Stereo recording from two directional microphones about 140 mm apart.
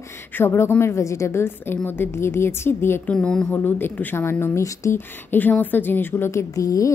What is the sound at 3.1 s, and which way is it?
Speech, 5° left (ahead or behind).